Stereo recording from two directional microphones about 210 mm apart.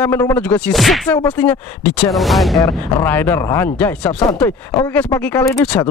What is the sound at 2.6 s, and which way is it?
Speech, 10° left (ahead or behind).